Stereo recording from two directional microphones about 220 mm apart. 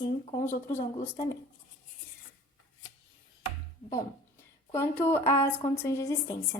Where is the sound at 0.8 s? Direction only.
30° left (ahead or behind).